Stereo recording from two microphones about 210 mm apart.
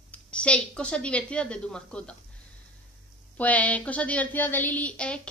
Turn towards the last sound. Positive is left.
turn(degrees=5)  # may be behind; listen again after turning